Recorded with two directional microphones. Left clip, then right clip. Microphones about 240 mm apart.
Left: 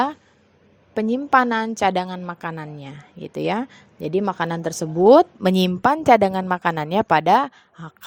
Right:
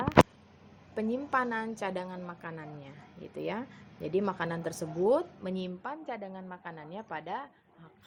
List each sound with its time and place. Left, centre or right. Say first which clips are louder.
0.9 s a woman's voice: left 13 dB; left